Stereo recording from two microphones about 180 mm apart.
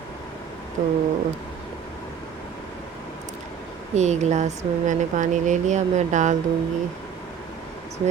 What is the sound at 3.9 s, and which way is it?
Speech, 40° right (ahead or behind).